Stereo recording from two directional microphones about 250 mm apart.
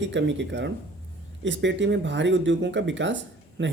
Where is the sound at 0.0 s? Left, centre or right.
Right.